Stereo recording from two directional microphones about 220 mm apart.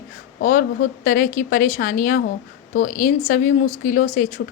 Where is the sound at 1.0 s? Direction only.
40° left (ahead or behind).